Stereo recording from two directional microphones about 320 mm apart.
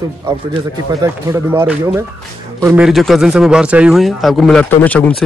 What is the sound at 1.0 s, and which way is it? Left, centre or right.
A man's voice, centre.